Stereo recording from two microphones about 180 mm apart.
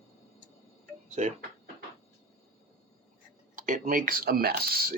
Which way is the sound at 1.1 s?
40° right (ahead or behind).